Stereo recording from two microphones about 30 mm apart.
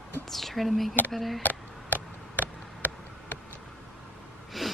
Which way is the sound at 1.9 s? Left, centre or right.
Right.